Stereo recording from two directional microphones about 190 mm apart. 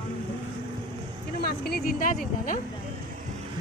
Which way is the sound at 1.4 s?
55° left (ahead or behind).